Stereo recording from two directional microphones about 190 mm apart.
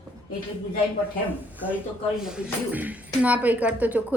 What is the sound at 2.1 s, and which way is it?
A woman's voice, 5° right (ahead or behind).